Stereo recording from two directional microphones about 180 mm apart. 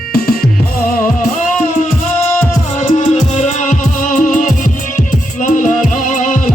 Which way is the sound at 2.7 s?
45° left (ahead or behind).